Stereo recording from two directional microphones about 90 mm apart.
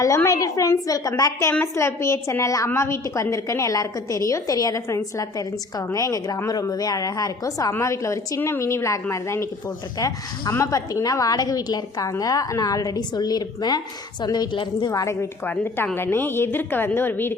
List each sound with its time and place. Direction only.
0.3 s a woman's voice: 35° left (ahead or behind)
10.5 s a woman's voice: 35° left (ahead or behind); by 14.9 s 65° left (ahead or behind)
14.9 s a woman's voice: 35° left (ahead or behind)
15.4 s a woman's voice: 25° left (ahead or behind)